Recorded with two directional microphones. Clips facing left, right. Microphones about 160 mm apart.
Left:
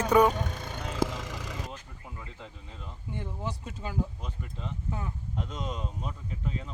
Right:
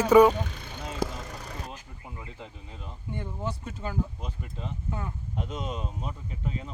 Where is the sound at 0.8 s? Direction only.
85° left.